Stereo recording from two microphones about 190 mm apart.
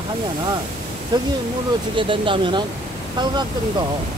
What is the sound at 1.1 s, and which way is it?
Speech, 25° right (ahead or behind).